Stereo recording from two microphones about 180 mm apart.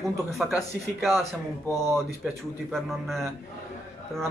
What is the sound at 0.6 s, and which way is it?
Speech, centre (ahead or behind).